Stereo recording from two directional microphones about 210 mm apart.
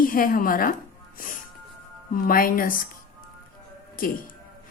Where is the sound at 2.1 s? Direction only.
40° left (ahead or behind).